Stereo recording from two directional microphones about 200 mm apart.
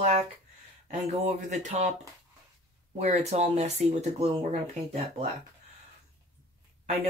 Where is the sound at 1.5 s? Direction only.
35° right (ahead or behind).